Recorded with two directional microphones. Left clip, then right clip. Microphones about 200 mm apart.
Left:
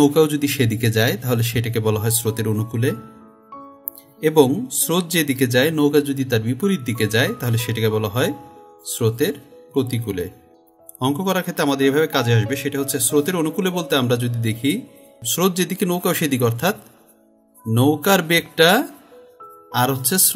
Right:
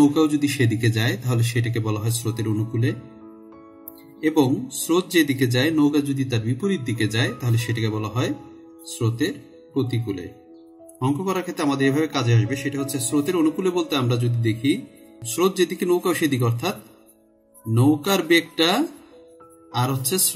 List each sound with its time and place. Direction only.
0.0 s speech: 45° left (ahead or behind)
4.2 s a man's voice: 40° left (ahead or behind)
17.7 s a man's voice: 45° left (ahead or behind)